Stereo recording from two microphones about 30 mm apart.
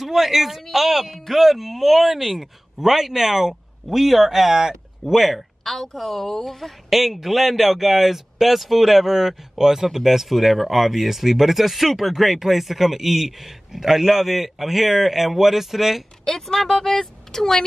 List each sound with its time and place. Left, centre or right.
0.0 s speech: centre
4.6 s speech: centre
5.1 s speech: centre
5.6 s a man's voice: centre
16.3 s speech: centre